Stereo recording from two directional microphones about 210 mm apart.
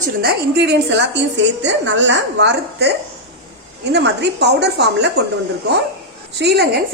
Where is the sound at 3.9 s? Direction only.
55° right (ahead or behind).